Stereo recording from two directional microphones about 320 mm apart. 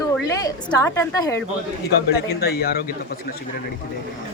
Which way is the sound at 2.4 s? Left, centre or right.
Left.